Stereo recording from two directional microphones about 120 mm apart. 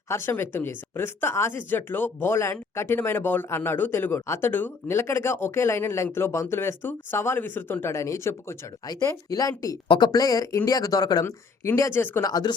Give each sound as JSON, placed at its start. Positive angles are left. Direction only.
{"t": 0.1, "sound": "speech", "side_deg": 20}
{"t": 12.2, "sound": "speech", "side_deg": 35}